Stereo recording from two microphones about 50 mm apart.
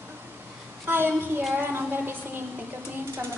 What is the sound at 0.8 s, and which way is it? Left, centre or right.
Child singing, right.